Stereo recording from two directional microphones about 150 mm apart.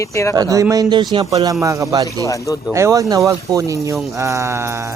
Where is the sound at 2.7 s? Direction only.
20° right (ahead or behind).